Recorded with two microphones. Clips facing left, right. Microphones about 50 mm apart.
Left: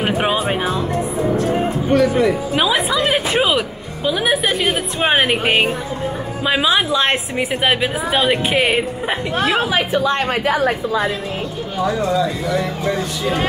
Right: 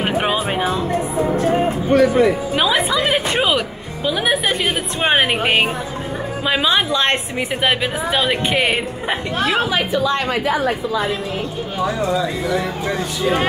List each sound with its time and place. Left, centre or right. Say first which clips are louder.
0.0 s speech: left 1 dB; centre
2.0 s music: right 2 dB; right
2.5 s a woman's voice: even; centre
9.9 s a woman's voice: even; left
11.8 s speech: left 2 dB; centre
13.2 s speech: right 4 dB; right